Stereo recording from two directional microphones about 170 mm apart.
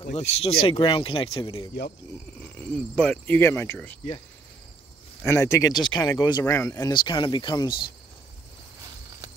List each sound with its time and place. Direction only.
0.0 s speech: 40° left (ahead or behind)
2.4 s speech: 10° left (ahead or behind)
5.3 s speech: 20° left (ahead or behind)